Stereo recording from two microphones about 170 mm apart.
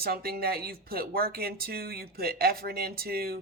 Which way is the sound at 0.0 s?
65° right (ahead or behind).